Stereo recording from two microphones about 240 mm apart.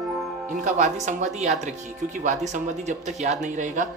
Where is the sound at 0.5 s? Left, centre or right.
Right.